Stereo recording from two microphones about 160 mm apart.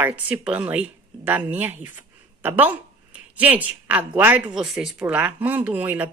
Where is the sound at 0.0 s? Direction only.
10° right (ahead or behind).